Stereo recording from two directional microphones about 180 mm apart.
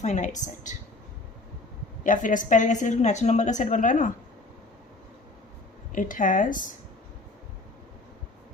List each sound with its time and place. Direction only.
0.0 s a woman's voice: 40° left (ahead or behind)
2.0 s a woman's voice: 45° left (ahead or behind)
5.9 s a woman's voice: 45° left (ahead or behind)